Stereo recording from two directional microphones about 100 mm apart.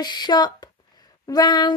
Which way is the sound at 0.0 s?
45° left (ahead or behind).